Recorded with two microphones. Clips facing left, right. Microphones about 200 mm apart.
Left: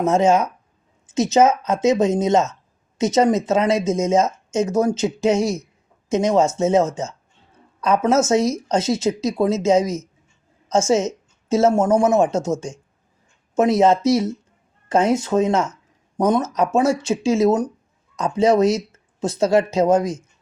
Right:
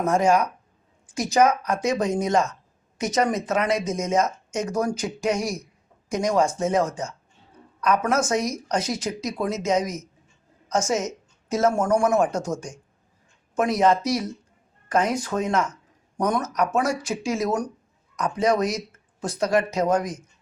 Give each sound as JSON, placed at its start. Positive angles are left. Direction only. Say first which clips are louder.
{"t": 0.0, "sound": "speech", "louder": "left 4 dB", "side_deg": 25}